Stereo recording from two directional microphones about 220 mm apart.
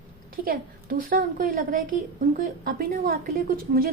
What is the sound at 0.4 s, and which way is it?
A woman's voice, 40° right (ahead or behind).